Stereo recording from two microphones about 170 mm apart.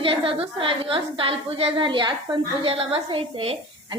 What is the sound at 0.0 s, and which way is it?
A woman's voice, 30° right (ahead or behind).